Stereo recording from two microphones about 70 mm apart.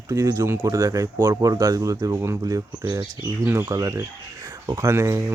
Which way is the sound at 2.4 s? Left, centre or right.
Right.